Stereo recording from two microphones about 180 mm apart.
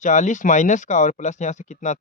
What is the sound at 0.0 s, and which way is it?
Speech, 45° left (ahead or behind).